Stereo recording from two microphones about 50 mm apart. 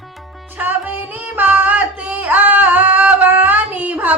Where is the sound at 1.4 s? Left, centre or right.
Right.